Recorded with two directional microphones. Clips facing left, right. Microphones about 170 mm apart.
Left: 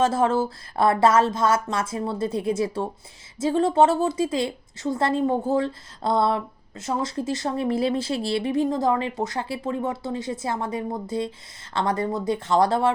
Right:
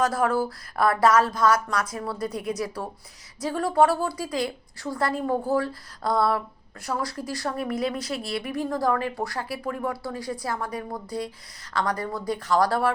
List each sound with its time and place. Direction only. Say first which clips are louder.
0.0 s a woman's voice: left 2 dB; 25° left (ahead or behind)